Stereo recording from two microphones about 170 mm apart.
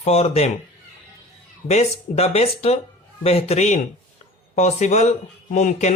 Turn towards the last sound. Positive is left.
turn(degrees=45)  # may be behind; listen again after turning